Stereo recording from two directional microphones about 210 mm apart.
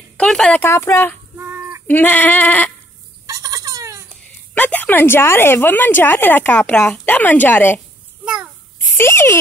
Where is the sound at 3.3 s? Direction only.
15° right (ahead or behind).